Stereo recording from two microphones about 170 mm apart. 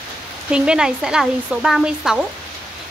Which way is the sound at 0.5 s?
5° right (ahead or behind).